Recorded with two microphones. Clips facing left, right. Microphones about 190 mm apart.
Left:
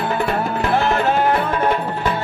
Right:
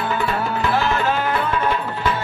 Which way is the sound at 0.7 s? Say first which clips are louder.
Left 5 dB; 55° left (ahead or behind).